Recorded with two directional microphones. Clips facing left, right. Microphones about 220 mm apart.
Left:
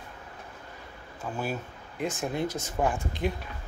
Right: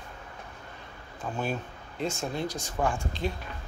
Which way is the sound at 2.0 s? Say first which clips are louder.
Left 1 dB; 20° left (ahead or behind).